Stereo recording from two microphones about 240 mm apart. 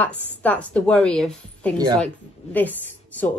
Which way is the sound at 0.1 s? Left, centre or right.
Centre.